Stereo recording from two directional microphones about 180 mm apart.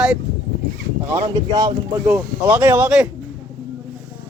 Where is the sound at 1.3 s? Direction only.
20° right (ahead or behind).